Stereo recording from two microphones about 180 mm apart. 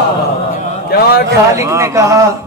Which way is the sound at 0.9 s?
60° left (ahead or behind).